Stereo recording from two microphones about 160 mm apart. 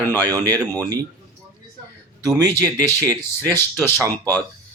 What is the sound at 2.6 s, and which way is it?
Speech, 20° right (ahead or behind).